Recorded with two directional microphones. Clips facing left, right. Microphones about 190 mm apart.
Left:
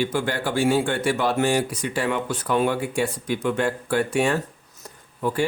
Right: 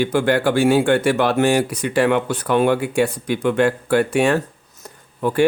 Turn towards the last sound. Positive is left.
turn(degrees=-65)  # may be behind; listen again after turning